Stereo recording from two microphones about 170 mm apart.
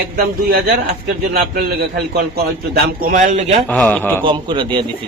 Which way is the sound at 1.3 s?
65° right (ahead or behind).